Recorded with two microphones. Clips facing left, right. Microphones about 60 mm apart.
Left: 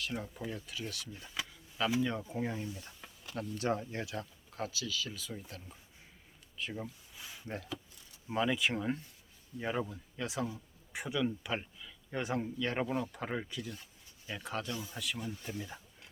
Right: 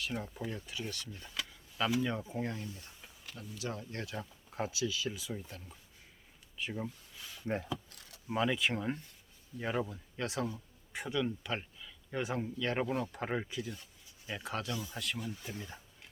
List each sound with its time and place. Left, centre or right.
0.0 s speech: centre
2.6 s speech: left
3.3 s speech: left
3.9 s speech: centre
4.5 s speech: right
5.4 s speech: centre
6.6 s speech: centre
7.2 s a sound: centre
7.4 s speech: right
7.9 s a sound: right
8.3 s speech: centre
14.7 s speech: centre
14.9 s speech: centre